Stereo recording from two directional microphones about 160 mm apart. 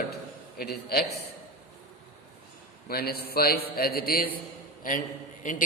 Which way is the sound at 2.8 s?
75° left (ahead or behind).